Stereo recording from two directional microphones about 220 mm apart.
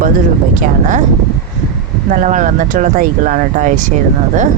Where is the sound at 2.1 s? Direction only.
35° right (ahead or behind).